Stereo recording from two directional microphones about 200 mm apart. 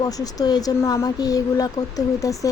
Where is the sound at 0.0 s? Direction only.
20° left (ahead or behind).